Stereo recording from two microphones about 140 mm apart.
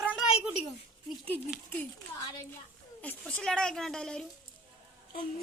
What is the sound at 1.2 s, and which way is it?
Speech, 10° left (ahead or behind).